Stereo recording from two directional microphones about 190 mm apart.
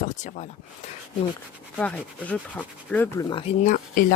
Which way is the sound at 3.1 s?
30° left (ahead or behind).